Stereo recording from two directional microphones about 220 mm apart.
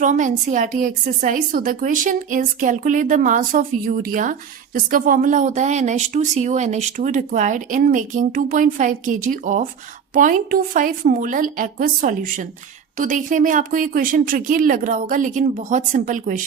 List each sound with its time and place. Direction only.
0.0 s a woman's voice: 35° right (ahead or behind)